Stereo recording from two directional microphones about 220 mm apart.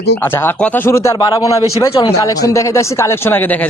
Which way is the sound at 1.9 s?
25° left (ahead or behind).